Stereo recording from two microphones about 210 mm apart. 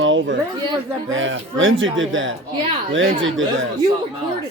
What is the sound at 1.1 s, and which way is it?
Speech, 65° right (ahead or behind).